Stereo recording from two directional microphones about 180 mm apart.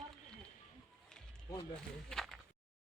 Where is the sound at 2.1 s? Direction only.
Centre (ahead or behind).